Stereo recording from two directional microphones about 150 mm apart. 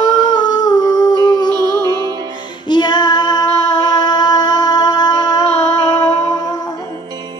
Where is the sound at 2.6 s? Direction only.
30° left (ahead or behind).